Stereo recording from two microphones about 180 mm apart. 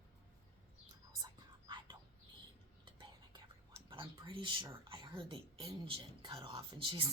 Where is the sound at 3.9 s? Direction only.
25° right (ahead or behind).